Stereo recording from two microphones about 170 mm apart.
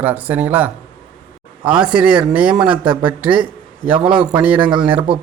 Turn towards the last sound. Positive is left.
turn(degrees=-5)  # may be behind; listen again after turning